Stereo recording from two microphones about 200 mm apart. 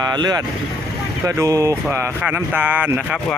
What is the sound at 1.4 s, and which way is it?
Speech, 15° right (ahead or behind).